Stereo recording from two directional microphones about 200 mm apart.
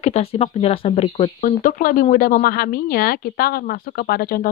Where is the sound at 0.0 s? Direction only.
30° left (ahead or behind).